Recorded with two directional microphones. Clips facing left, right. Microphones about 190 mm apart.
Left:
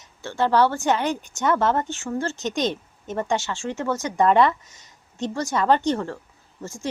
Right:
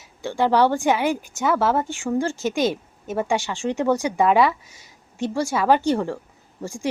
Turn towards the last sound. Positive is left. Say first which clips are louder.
# right 4 dB
turn(degrees=-10)  # may be behind; listen again after turning